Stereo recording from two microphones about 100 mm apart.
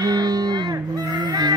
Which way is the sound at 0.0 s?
40° right (ahead or behind).